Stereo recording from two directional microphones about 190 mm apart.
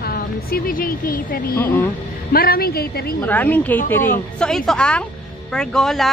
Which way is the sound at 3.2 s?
10° left (ahead or behind).